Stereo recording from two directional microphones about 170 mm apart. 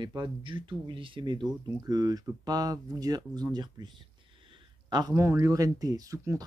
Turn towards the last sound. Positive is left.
turn(degrees=-20)  # may be behind; listen again after turning